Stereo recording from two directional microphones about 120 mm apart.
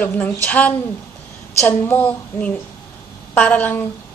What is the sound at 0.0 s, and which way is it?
Speech, 15° left (ahead or behind).